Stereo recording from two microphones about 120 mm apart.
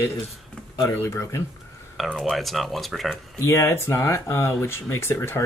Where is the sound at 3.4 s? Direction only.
25° left (ahead or behind).